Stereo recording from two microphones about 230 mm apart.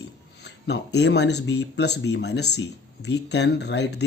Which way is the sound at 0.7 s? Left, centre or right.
Left.